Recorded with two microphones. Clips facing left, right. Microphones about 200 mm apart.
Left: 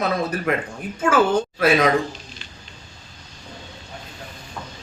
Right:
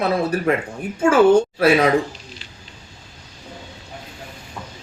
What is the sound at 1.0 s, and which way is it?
Speech, 30° right (ahead or behind).